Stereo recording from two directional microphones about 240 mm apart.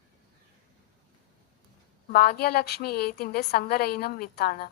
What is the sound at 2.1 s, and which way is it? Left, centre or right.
A woman's voice, left.